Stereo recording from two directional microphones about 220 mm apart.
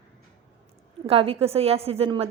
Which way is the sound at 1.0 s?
25° right (ahead or behind).